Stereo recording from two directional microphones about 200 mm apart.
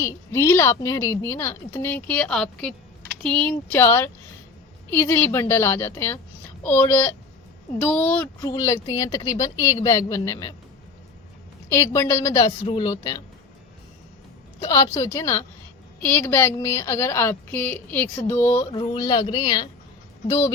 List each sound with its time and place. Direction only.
0.0 s a woman's voice: 15° left (ahead or behind)
8.4 s a woman's voice: 15° left (ahead or behind)
11.7 s a woman's voice: 15° left (ahead or behind)
14.6 s a woman's voice: 15° left (ahead or behind)
18.7 s a woman's voice: 20° left (ahead or behind)